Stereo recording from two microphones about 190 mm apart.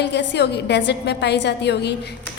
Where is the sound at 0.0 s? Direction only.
65° left (ahead or behind).